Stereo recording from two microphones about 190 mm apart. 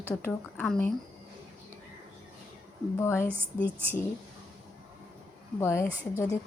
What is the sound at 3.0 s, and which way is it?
Speech, 15° left (ahead or behind).